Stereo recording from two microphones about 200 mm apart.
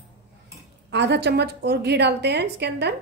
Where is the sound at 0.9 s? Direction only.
60° right (ahead or behind).